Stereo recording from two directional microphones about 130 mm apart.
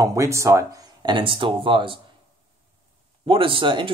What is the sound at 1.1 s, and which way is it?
Speech, 40° right (ahead or behind).